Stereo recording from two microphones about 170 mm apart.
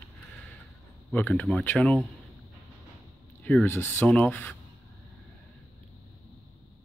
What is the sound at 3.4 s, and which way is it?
Speech, 10° left (ahead or behind).